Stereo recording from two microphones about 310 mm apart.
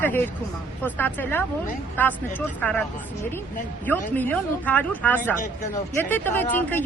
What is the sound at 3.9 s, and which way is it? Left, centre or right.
Speech, centre.